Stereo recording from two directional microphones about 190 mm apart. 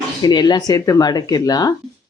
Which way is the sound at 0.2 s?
20° left (ahead or behind).